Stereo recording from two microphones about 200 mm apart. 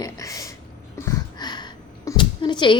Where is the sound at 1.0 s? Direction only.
20° left (ahead or behind).